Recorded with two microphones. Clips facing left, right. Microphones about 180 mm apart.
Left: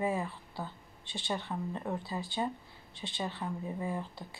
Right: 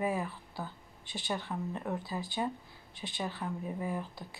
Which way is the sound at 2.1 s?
25° left (ahead or behind).